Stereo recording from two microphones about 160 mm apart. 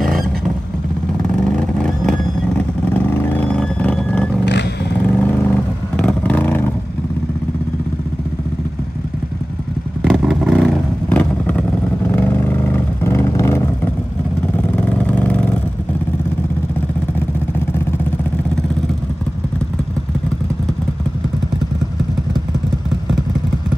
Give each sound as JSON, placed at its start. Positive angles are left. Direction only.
{"t": 0.0, "sound": "vehicle", "side_deg": 0}
{"t": 1.4, "sound": "vehicle", "side_deg": 5}
{"t": 10.0, "sound": "vehicle", "side_deg": 0}